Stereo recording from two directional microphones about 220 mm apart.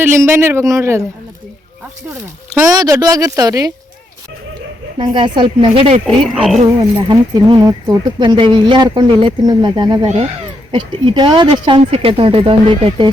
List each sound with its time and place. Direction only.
0.0 s speech: 10° right (ahead or behind)
2.0 s speech: 10° right (ahead or behind)
4.9 s speech: 20° right (ahead or behind)
6.1 s speech: centre (ahead or behind)
6.7 s speech: 20° right (ahead or behind)